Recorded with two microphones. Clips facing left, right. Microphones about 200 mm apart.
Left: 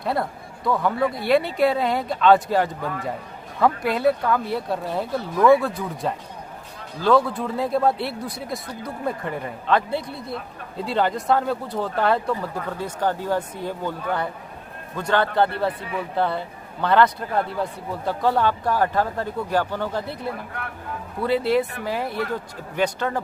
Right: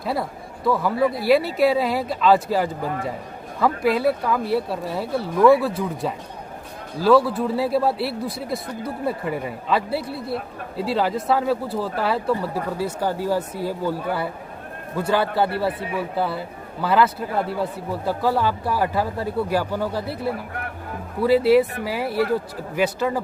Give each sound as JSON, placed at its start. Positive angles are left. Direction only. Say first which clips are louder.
{"t": 0.0, "sound": "speech", "louder": "left 1 dB", "side_deg": 0}
{"t": 21.2, "sound": "speech", "louder": "right 5 dB", "side_deg": -5}